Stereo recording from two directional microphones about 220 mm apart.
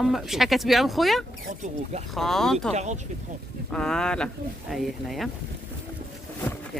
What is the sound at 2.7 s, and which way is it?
Speech, 30° right (ahead or behind).